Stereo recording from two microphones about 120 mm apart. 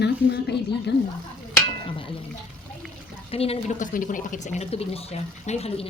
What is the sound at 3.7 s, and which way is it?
Speech, 90° left.